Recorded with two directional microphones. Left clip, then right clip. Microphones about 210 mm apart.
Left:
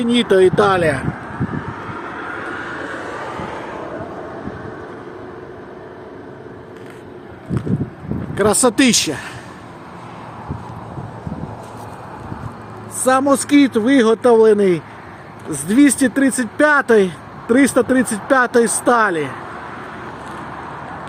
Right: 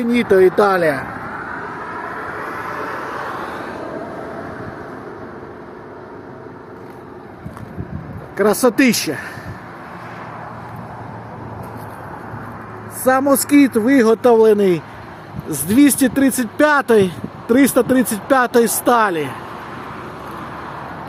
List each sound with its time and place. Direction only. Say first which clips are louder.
0.0 s speech: even; 20° left (ahead or behind)
0.3 s speech: right 1 dB; centre (ahead or behind)
8.4 s speech: even; centre (ahead or behind)
13.1 s speech: even; 5° right (ahead or behind)